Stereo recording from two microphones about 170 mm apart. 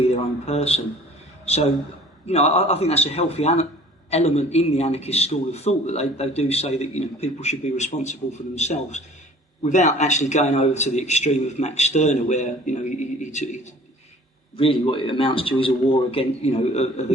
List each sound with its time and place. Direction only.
0.1 s a sound: 35° left (ahead or behind)
2.2 s a man's voice: 40° left (ahead or behind)
14.5 s a man's voice: 30° left (ahead or behind)